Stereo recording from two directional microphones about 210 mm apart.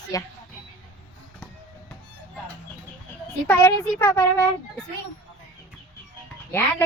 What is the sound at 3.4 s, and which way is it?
Speech, 10° left (ahead or behind).